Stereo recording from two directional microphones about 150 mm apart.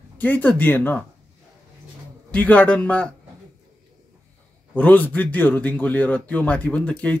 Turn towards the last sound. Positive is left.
turn(degrees=10)  # may be behind; listen again after turning